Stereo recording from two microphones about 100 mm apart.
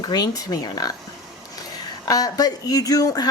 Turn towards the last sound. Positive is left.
turn(degrees=40)  # may be behind; listen again after turning